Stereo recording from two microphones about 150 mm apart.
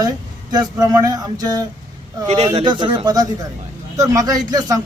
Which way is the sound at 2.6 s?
30° right (ahead or behind).